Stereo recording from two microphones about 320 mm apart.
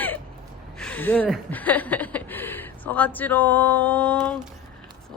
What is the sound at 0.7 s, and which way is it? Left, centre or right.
Speech, centre.